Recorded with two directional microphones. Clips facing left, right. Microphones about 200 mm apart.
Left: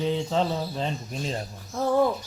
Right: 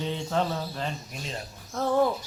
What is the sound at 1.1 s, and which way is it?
Speech, 35° left (ahead or behind).